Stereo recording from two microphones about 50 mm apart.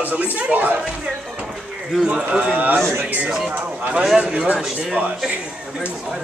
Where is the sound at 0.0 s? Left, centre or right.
Right.